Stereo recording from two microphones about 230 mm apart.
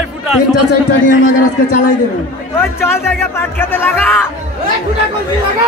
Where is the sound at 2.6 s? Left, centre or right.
Centre.